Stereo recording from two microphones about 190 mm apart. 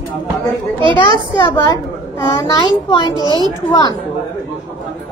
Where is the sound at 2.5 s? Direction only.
25° left (ahead or behind).